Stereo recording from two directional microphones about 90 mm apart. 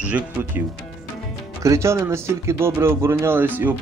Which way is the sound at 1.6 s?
35° right (ahead or behind).